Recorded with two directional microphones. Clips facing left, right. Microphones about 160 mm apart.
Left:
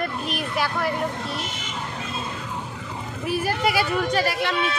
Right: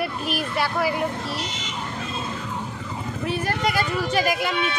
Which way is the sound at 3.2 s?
5° left (ahead or behind).